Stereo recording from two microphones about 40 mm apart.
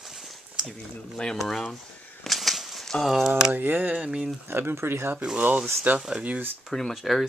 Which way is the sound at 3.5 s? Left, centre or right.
Right.